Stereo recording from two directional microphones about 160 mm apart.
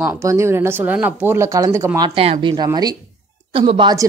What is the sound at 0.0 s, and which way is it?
Speech, 20° right (ahead or behind).